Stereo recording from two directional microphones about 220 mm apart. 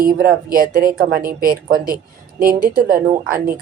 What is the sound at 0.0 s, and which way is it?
Speech, 40° right (ahead or behind).